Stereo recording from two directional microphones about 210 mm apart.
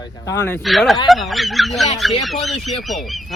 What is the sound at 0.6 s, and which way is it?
Speech, centre (ahead or behind).